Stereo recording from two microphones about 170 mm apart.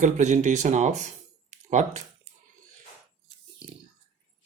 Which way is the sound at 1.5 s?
45° right (ahead or behind).